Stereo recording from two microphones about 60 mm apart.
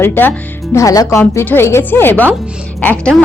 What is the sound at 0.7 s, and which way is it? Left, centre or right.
Speech, left.